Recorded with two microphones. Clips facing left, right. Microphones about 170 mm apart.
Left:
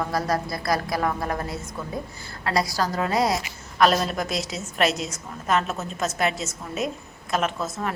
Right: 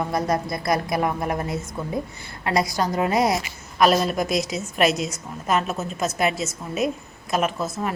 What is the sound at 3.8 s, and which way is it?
A woman's voice, 10° right (ahead or behind).